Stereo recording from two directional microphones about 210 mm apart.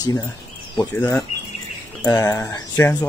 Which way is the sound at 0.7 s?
10° left (ahead or behind).